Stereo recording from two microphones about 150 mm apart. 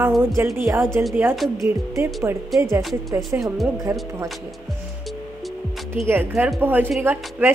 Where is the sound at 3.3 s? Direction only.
20° right (ahead or behind).